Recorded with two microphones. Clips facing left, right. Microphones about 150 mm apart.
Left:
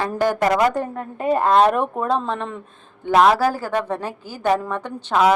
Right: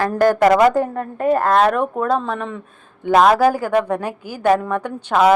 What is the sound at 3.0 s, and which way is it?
A woman's voice, 15° right (ahead or behind).